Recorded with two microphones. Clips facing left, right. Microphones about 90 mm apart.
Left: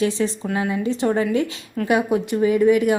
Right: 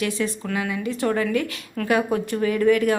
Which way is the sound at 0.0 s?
25° left (ahead or behind).